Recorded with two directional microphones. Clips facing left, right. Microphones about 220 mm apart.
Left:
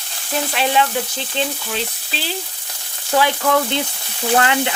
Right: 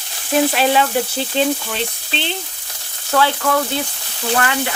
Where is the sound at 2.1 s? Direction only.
5° left (ahead or behind).